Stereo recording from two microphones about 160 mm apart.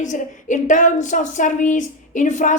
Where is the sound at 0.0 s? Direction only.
50° left (ahead or behind).